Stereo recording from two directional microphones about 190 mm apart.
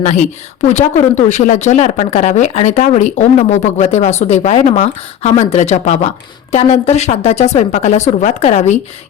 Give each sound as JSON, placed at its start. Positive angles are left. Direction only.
{"t": 0.7, "sound": "speech", "side_deg": 35}